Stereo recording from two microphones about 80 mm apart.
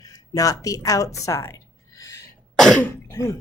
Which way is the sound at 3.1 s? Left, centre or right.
Left.